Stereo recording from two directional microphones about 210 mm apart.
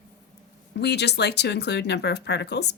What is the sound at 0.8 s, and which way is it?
Speech, 50° left (ahead or behind).